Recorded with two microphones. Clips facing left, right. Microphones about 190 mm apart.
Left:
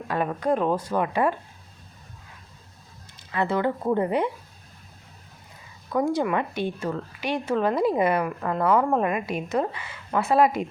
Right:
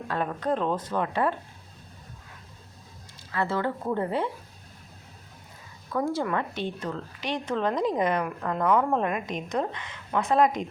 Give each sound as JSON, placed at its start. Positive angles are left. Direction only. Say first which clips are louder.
{"t": 0.1, "sound": "a woman's voice", "louder": "left 4 dB", "side_deg": 10}
{"t": 3.3, "sound": "a woman's voice", "louder": "left 3 dB", "side_deg": 15}
{"t": 5.9, "sound": "a woman's voice", "louder": "left 4 dB", "side_deg": 15}